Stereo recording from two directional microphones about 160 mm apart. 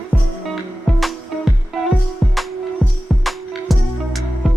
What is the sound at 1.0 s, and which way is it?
Music, centre (ahead or behind).